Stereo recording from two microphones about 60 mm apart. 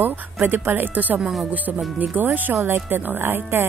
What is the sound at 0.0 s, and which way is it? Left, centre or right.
Speech, right.